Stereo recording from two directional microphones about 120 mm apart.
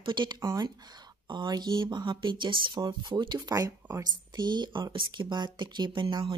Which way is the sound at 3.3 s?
25° right (ahead or behind).